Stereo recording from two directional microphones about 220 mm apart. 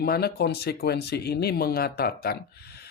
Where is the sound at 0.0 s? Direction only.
45° left (ahead or behind).